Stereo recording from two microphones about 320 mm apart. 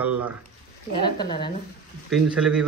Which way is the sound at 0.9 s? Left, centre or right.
Centre.